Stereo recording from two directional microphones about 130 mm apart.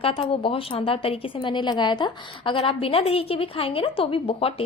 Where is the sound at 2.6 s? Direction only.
50° left (ahead or behind).